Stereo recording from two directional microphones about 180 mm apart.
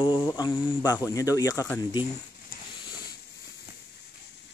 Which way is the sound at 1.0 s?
20° left (ahead or behind).